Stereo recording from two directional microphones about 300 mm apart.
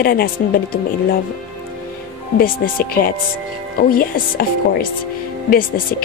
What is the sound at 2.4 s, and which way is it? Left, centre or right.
Speech, left.